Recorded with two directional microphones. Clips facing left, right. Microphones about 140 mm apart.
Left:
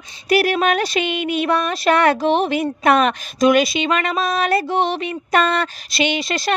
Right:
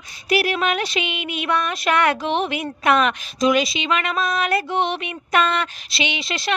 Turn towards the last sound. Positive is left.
turn(degrees=45)  # may be behind; listen again after turning